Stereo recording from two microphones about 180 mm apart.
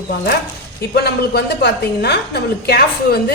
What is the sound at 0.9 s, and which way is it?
A woman's voice, 65° left (ahead or behind).